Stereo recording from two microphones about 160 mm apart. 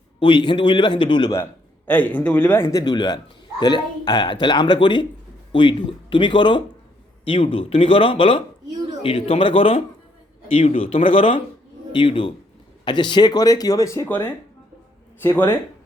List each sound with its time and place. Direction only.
0.2 s speech: 30° left (ahead or behind)
1.9 s speech: 10° left (ahead or behind)
2.8 s a man's voice: 25° left (ahead or behind)